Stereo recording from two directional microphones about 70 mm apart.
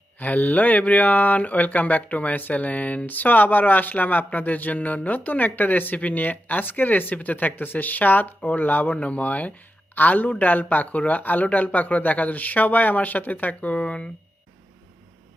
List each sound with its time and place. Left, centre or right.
0.2 s speech: left